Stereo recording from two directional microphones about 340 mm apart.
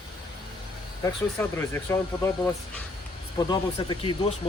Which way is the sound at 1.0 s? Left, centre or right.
Centre.